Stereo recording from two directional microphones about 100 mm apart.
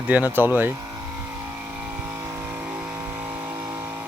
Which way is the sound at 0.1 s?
20° right (ahead or behind).